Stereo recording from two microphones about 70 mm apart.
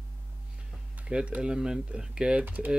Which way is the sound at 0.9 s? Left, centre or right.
Centre.